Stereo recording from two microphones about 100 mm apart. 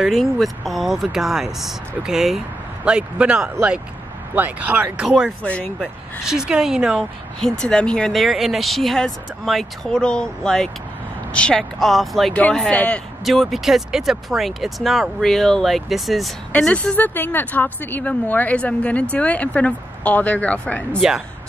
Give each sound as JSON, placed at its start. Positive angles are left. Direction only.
{"t": 0.0, "sound": "speech", "side_deg": 0}
{"t": 5.4, "sound": "a woman's voice", "side_deg": 10}
{"t": 6.2, "sound": "speech", "side_deg": -5}
{"t": 7.3, "sound": "speech", "side_deg": 5}
{"t": 12.4, "sound": "a woman's voice", "side_deg": 10}
{"t": 13.2, "sound": "speech", "side_deg": 0}
{"t": 16.5, "sound": "a woman's voice", "side_deg": 10}